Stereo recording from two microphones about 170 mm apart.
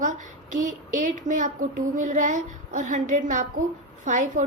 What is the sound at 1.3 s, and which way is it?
A woman's voice, 50° right (ahead or behind).